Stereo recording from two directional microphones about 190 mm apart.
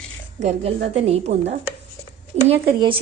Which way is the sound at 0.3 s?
35° right (ahead or behind).